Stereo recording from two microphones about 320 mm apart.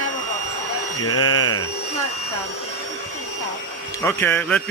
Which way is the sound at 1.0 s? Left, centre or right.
Left.